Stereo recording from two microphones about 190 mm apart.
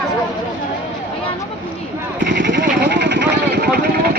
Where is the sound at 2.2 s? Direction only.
65° right (ahead or behind).